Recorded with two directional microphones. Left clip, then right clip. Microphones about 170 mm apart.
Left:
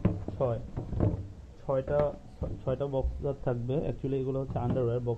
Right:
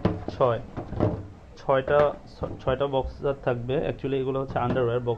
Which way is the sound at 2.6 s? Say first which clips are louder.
Right 7 dB; 15° left (ahead or behind).